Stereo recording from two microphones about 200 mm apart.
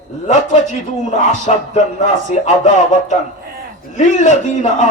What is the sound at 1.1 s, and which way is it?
A man's voice, 35° left (ahead or behind).